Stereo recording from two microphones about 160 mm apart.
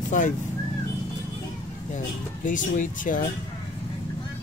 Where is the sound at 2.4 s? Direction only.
55° left (ahead or behind).